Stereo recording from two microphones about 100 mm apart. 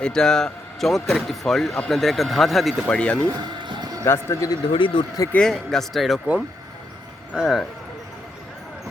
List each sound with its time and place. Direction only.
0.0 s speech: 5° left (ahead or behind)
2.9 s speech: 10° left (ahead or behind)
3.2 s a sound: 45° right (ahead or behind)
4.0 s speech: 25° left (ahead or behind)
4.7 s speech: 55° left (ahead or behind)
5.3 s speech: 5° left (ahead or behind)
7.3 s speech: 5° right (ahead or behind)